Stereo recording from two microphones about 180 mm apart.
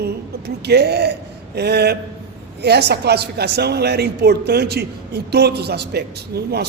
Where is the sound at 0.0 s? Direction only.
65° right (ahead or behind).